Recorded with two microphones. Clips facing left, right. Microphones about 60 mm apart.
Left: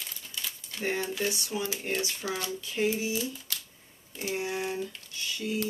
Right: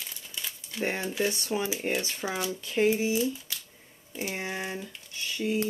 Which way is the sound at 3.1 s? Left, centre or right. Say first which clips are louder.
Right 5 dB; centre.